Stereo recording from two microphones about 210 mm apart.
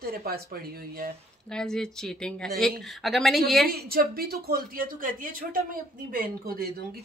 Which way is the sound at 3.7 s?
45° right (ahead or behind).